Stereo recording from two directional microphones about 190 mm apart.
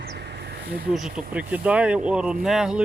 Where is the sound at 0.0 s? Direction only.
60° right (ahead or behind).